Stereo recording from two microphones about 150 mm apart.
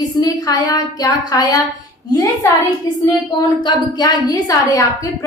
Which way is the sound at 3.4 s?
25° left (ahead or behind).